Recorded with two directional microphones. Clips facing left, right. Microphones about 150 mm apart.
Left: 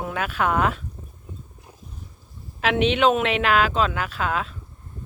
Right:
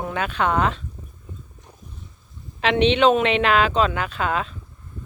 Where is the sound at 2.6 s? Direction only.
5° left (ahead or behind).